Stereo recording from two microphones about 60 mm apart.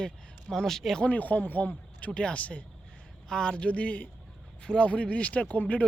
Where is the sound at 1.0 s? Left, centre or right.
Left.